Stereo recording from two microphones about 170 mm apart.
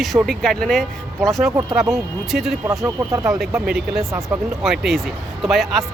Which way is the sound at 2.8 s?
15° right (ahead or behind).